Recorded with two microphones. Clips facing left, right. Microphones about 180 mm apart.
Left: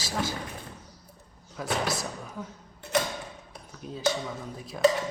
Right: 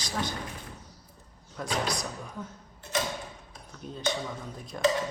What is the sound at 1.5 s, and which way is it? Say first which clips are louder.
Speech: left 1 dB; 5° left (ahead or behind).